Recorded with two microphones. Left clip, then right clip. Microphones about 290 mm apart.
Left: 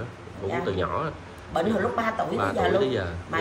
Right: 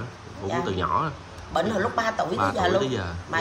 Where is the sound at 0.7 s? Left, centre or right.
Centre.